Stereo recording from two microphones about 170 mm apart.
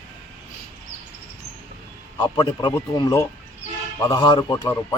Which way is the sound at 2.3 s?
25° left (ahead or behind).